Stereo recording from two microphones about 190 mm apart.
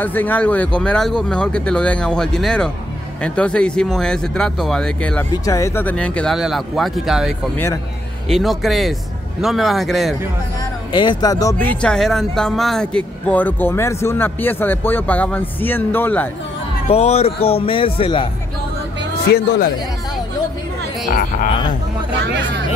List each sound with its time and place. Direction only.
0.0 s speech: 10° left (ahead or behind)
5.3 s speech: 15° left (ahead or behind); by 7.3 s centre (ahead or behind)
7.5 s speech: 10° left (ahead or behind)
8.3 s speech: centre (ahead or behind)
10.9 s a man's voice: 25° left (ahead or behind)
11.5 s speech: 10° left (ahead or behind)
16.9 s a man's voice: 35° left (ahead or behind)
21.1 s speech: 45° left (ahead or behind)